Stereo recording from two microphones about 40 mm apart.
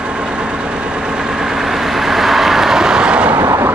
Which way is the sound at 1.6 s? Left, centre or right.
Centre.